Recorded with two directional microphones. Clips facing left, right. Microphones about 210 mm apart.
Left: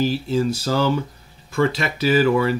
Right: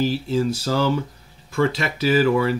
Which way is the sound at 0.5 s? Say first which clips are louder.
Left 1 dB; 45° left (ahead or behind).